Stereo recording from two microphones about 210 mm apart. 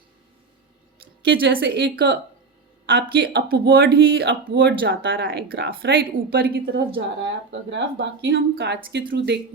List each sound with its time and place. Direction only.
1.2 s a woman's voice: 55° right (ahead or behind)
7.5 s a woman's voice: 60° right (ahead or behind)